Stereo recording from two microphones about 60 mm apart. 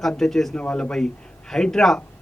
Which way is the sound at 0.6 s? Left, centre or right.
Centre.